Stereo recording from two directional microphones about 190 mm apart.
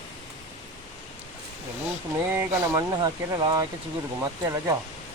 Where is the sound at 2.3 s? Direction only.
15° right (ahead or behind).